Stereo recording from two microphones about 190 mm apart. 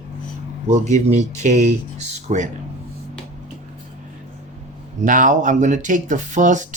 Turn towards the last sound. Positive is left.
turn(degrees=-40)  # may be behind; listen again after turning